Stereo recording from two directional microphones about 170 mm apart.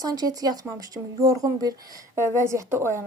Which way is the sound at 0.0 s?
20° right (ahead or behind).